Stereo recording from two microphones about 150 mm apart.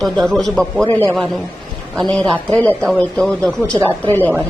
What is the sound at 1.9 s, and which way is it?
Speech, 5° left (ahead or behind).